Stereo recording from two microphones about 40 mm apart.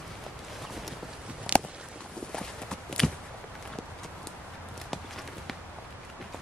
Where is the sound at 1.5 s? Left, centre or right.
Right.